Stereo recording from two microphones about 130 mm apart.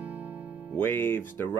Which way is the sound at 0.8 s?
15° left (ahead or behind).